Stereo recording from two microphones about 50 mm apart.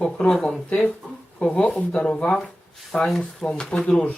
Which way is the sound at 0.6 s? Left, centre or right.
Left.